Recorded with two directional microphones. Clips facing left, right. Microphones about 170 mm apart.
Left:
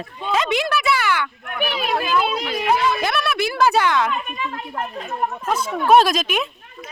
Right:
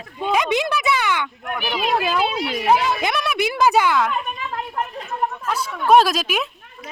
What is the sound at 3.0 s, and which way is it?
Speech, 15° right (ahead or behind).